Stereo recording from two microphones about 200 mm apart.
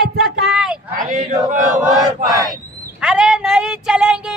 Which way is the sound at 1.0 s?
40° right (ahead or behind).